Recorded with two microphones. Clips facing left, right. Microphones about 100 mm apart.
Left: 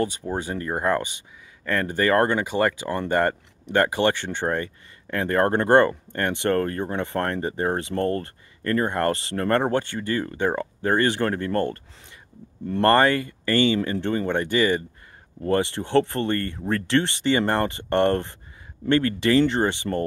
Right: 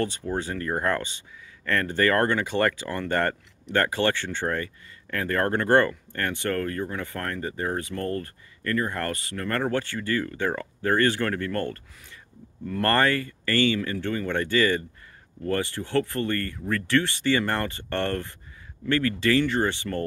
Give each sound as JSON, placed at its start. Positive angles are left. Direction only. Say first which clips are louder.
{"t": 0.0, "sound": "speech", "louder": "left 2 dB", "side_deg": 15}